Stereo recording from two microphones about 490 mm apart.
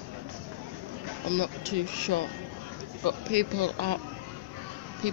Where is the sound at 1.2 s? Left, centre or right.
Right.